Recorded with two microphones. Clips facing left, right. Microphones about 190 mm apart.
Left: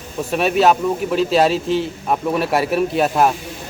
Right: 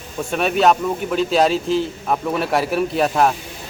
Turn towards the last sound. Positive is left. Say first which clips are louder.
# left 1 dB
turn(degrees=0)  # may be behind; listen again after turning